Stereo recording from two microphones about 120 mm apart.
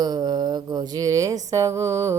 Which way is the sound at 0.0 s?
35° right (ahead or behind).